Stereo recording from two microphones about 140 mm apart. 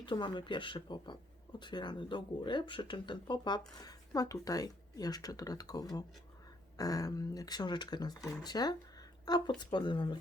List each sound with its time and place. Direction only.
0.0 s speech: 35° left (ahead or behind)